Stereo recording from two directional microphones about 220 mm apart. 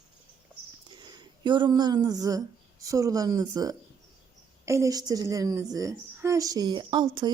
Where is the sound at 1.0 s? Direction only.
20° right (ahead or behind).